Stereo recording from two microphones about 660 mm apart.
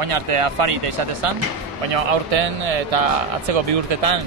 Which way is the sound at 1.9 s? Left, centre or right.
Right.